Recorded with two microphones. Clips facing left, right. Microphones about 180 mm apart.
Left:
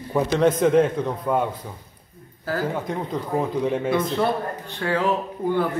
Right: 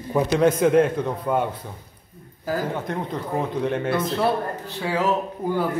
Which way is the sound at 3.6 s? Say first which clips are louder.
Left 1 dB; centre (ahead or behind).